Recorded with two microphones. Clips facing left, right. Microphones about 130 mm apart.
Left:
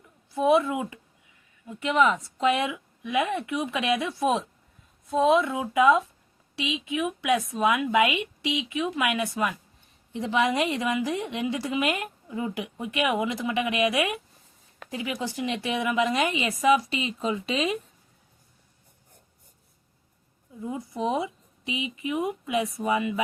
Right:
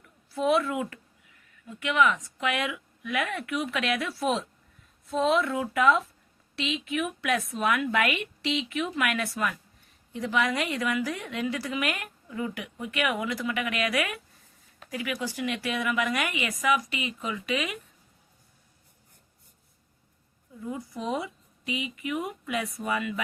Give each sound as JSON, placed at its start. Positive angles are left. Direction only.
{"t": 0.0, "sound": "a woman's voice", "side_deg": 20}
{"t": 20.6, "sound": "a woman's voice", "side_deg": 20}